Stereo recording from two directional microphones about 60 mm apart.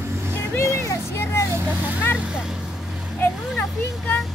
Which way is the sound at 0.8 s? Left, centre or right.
Left.